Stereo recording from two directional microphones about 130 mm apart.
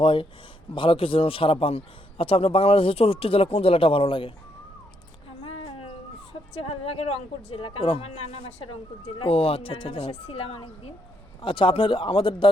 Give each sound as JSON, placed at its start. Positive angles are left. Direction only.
{"t": 0.0, "sound": "speech", "side_deg": 45}
{"t": 5.4, "sound": "a sound", "side_deg": 45}
{"t": 6.5, "sound": "speech", "side_deg": 50}